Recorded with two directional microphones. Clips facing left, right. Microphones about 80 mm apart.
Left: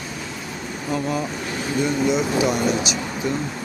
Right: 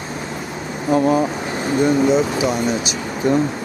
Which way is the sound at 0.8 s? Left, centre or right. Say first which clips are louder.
Right 9 dB; right.